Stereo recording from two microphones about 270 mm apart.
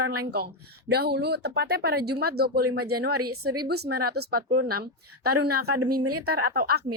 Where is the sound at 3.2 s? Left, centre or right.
Right.